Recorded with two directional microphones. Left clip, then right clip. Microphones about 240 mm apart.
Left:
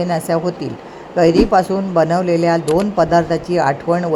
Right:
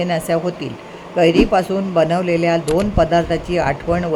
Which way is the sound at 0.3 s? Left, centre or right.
Centre.